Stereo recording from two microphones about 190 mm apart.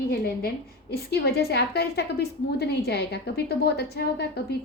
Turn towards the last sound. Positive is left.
turn(degrees=60)  # may be behind; listen again after turning